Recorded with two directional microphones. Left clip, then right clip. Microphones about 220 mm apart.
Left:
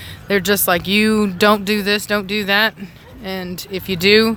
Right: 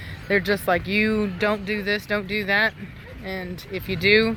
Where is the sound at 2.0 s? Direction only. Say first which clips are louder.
Left 6 dB; 25° left (ahead or behind).